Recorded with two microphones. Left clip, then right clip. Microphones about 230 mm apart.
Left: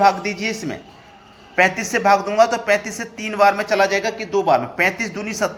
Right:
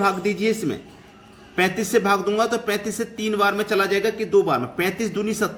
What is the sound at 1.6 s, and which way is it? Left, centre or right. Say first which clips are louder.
Speech: left 2 dB; centre.